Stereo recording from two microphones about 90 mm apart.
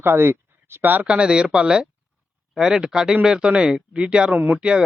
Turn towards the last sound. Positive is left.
turn(degrees=-20)  # may be behind; listen again after turning